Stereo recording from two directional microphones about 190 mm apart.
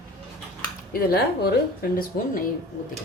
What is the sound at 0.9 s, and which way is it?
Speech, 55° left (ahead or behind).